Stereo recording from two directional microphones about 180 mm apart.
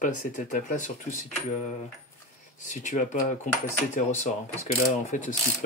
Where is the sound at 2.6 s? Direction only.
45° left (ahead or behind).